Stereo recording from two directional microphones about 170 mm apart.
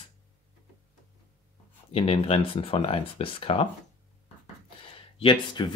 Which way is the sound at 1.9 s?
35° left (ahead or behind).